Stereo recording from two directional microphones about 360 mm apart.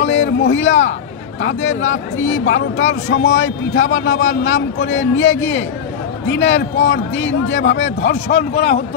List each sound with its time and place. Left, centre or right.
0.0 s speech: left